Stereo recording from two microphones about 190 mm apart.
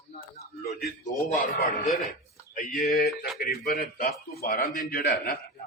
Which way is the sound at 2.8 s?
45° left (ahead or behind).